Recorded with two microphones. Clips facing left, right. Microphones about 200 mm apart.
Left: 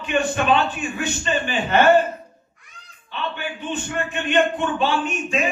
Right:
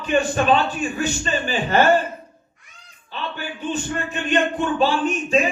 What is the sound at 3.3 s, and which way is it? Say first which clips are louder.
A man's voice: right 1 dB; 35° right (ahead or behind).